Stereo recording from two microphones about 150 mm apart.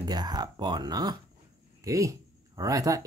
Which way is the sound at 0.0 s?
30° right (ahead or behind).